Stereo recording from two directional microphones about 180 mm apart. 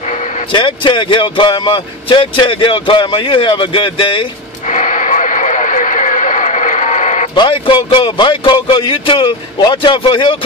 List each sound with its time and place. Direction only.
0.5 s speech: 25° left (ahead or behind)
4.6 s radio: 45° left (ahead or behind)
7.3 s speech: 25° left (ahead or behind)